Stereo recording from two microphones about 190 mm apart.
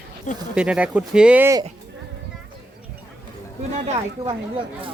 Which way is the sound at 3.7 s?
35° right (ahead or behind).